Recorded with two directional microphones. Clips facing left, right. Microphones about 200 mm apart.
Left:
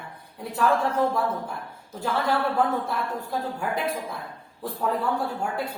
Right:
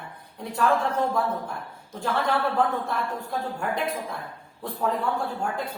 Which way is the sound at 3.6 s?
5° left (ahead or behind).